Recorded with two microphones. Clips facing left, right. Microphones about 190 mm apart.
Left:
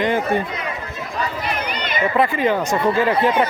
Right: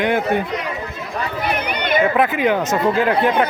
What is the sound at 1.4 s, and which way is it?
Run, 60° right (ahead or behind).